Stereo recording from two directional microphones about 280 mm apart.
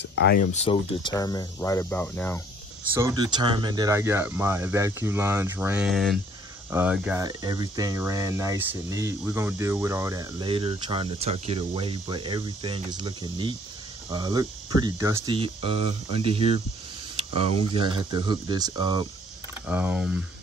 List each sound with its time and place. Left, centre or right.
0.0 s speech: left; by 2.4 s centre
2.9 s speech: centre
17.2 s a sound: centre
17.6 s speech: centre